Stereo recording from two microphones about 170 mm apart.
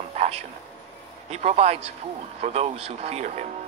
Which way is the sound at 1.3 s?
40° right (ahead or behind).